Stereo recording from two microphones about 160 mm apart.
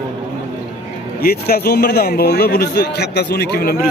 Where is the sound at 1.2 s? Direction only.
75° left (ahead or behind).